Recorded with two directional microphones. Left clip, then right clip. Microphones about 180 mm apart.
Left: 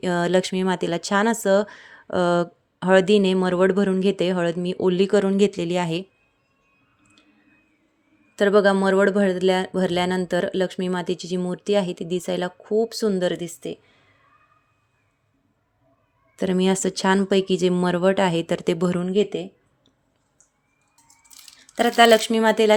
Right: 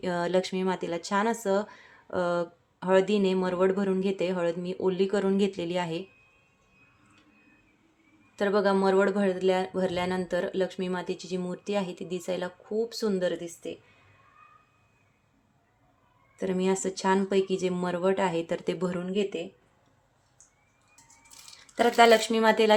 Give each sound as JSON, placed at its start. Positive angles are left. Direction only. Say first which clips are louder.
{"t": 0.0, "sound": "speech", "louder": "left 6 dB", "side_deg": 40}
{"t": 8.4, "sound": "speech", "louder": "left 7 dB", "side_deg": 40}
{"t": 16.3, "sound": "speech", "louder": "left 6 dB", "side_deg": 45}
{"t": 21.8, "sound": "speech", "louder": "left 4 dB", "side_deg": 45}